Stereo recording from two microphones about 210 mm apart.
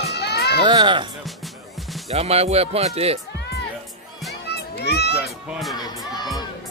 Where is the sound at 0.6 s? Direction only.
20° right (ahead or behind).